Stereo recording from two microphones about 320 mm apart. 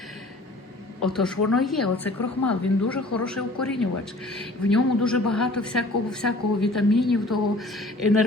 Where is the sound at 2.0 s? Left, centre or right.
Left.